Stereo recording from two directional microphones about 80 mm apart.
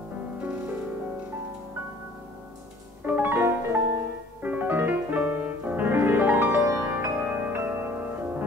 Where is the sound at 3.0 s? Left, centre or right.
Right.